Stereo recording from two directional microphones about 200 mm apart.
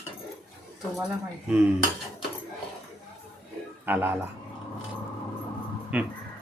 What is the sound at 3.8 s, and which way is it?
Speech, 10° right (ahead or behind).